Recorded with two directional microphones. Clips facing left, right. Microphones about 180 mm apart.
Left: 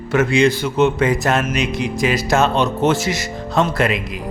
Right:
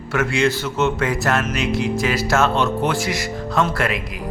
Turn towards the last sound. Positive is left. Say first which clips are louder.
# left 3 dB
turn(degrees=20)  # may be behind; listen again after turning